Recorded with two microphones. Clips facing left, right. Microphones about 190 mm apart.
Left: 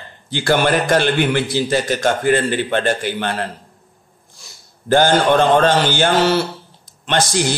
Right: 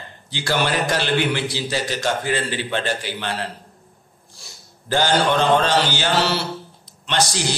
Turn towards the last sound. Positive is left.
turn(degrees=50)  # may be behind; listen again after turning